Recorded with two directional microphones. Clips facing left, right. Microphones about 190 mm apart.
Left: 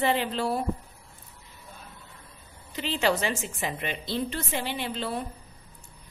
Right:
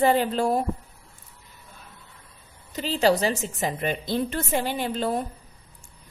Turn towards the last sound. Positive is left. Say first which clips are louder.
# right 5 dB
turn(degrees=-45)  # may be behind; listen again after turning